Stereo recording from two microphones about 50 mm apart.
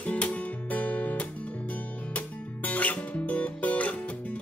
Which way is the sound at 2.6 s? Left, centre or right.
Left.